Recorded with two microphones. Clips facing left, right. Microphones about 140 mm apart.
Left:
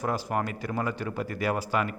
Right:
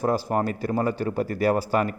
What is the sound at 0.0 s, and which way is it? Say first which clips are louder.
A man's voice: right 5 dB; 35° right (ahead or behind).